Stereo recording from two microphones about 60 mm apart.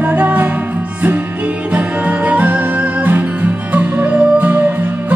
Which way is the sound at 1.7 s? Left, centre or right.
Right.